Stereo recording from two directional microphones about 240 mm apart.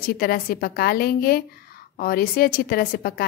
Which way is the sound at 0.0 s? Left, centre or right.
Left.